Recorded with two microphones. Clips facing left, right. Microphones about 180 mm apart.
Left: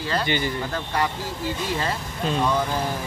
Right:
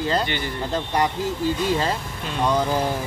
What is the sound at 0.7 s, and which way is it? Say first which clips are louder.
Speech: right 7 dB; 20° right (ahead or behind).